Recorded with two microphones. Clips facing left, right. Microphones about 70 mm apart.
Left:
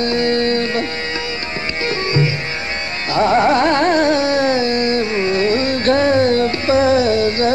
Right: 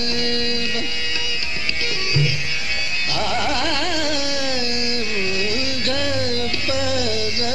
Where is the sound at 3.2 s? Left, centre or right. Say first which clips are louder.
Left 10 dB; left.